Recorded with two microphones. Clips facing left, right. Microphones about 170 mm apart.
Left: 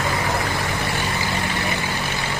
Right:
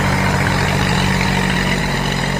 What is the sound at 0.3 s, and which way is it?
Vehicle, 85° right.